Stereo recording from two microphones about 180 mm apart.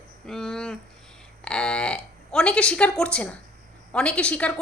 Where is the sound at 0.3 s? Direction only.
5° left (ahead or behind).